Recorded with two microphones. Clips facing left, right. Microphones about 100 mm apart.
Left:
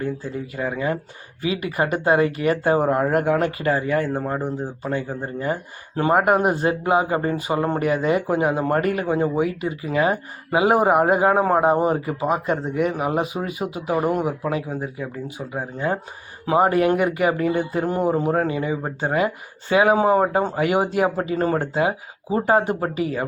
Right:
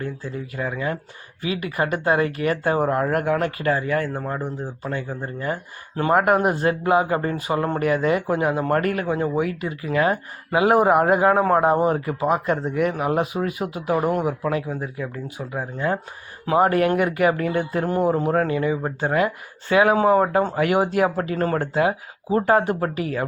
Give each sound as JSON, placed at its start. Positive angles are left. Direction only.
{"t": 0.5, "sound": "speech", "side_deg": 25}
{"t": 6.1, "sound": "speech", "side_deg": 10}
{"t": 14.4, "sound": "speech", "side_deg": 15}